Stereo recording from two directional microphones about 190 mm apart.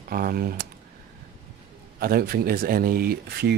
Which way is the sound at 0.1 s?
50° right (ahead or behind).